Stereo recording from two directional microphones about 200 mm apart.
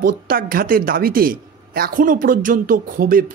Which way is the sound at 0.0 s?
45° right (ahead or behind).